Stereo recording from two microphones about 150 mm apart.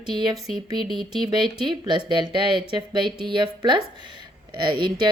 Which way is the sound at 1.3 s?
30° right (ahead or behind).